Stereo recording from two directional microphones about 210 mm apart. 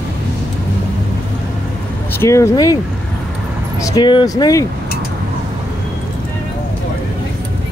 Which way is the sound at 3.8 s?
20° left (ahead or behind).